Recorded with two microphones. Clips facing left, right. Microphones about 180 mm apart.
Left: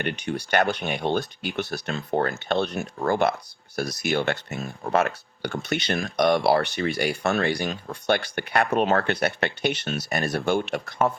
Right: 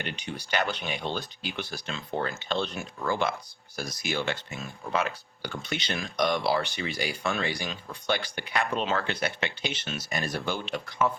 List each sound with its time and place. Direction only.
0.0 s speech: 55° left (ahead or behind)
3.8 s speech: 65° left (ahead or behind)